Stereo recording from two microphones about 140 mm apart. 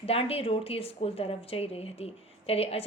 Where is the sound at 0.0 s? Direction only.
45° left (ahead or behind).